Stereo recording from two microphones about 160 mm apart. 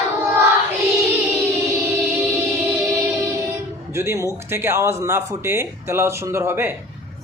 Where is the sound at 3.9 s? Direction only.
15° right (ahead or behind).